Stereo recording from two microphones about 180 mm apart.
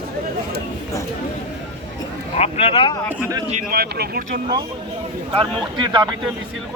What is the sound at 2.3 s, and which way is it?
Speech, 35° left (ahead or behind).